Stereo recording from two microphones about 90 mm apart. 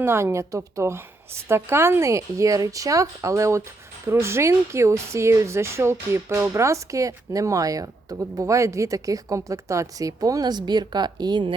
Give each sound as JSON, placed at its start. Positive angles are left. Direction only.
{"t": 0.0, "sound": "speech", "side_deg": -25}